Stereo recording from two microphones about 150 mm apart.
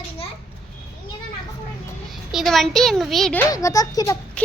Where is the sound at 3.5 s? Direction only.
20° left (ahead or behind).